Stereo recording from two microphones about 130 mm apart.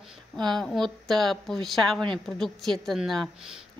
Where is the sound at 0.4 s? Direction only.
5° left (ahead or behind).